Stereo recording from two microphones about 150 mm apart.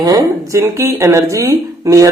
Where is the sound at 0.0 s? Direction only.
20° right (ahead or behind).